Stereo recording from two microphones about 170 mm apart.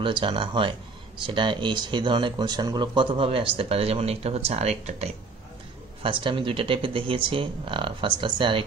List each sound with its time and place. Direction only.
0.0 s speech: 30° right (ahead or behind)